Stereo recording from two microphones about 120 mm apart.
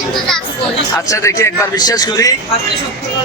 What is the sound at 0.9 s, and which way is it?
Speech, 25° left (ahead or behind).